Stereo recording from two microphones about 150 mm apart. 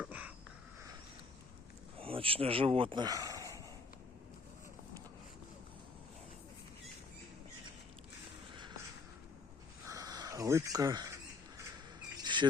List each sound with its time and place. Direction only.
0.0 s a sound: 10° right (ahead or behind)
2.0 s speech: 40° right (ahead or behind)
9.8 s rodents: 25° right (ahead or behind)
12.2 s bird: 30° right (ahead or behind)